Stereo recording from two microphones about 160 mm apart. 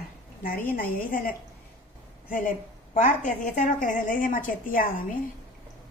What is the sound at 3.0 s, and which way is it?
A woman's voice, 55° left (ahead or behind).